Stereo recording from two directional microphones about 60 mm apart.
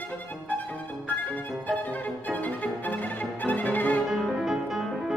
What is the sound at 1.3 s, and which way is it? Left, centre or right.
Violin, left.